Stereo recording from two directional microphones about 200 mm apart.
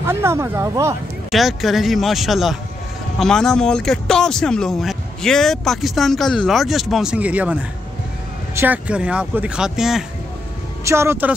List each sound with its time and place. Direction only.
0.0 s speech: 10° right (ahead or behind)
1.3 s speech: centre (ahead or behind)
8.5 s speech: 10° right (ahead or behind)
10.8 s speech: 15° right (ahead or behind)